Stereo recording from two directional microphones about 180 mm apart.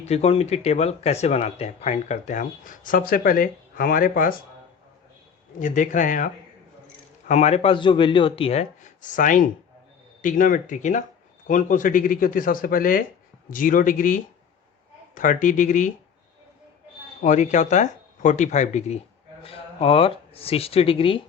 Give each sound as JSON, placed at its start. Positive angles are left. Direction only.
{"t": 0.0, "sound": "speech", "side_deg": 35}
{"t": 5.5, "sound": "speech", "side_deg": 45}
{"t": 17.2, "sound": "speech", "side_deg": 40}